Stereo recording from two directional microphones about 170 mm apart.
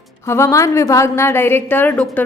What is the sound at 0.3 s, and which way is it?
A woman's voice, 15° left (ahead or behind).